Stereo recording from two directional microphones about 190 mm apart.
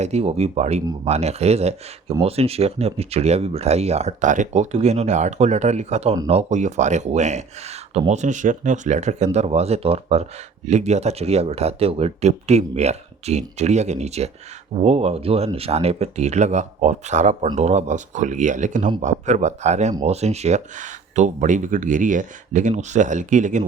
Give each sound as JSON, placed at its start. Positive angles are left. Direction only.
{"t": 0.0, "sound": "speech", "side_deg": -35}